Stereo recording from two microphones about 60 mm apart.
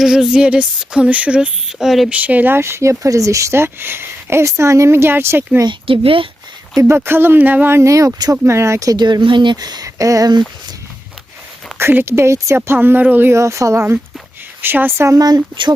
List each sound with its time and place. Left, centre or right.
0.0 s a sound: centre
1.8 s speech: centre
2.0 s a sound: right
2.6 s speech: right
4.4 s speech: right
6.8 s speech: right
7.7 s speech: right
7.9 s speech: right
8.4 s speech: right
8.9 s speech: right
11.8 s speech: right
13.3 s speech: right
14.6 s speech: right
15.0 s speech: right